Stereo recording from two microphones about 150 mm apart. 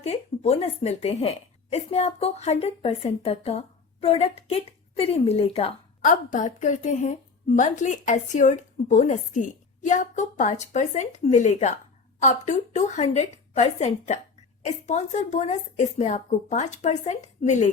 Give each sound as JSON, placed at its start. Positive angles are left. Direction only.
{"t": 0.0, "sound": "a woman's voice", "side_deg": 45}
{"t": 6.0, "sound": "a woman's voice", "side_deg": 60}